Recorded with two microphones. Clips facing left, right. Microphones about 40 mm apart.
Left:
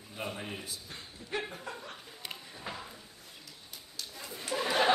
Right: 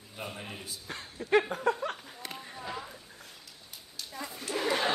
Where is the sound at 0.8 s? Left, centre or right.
Right.